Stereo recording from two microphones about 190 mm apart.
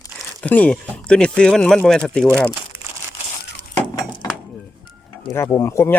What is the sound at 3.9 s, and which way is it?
Chink, 25° left (ahead or behind).